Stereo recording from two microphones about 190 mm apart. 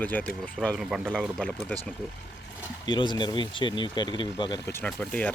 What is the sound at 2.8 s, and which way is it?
Speech, 25° left (ahead or behind).